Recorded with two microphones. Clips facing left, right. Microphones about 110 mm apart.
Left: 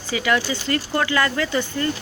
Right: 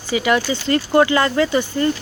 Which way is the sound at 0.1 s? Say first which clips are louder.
Right 4 dB; 15° right (ahead or behind).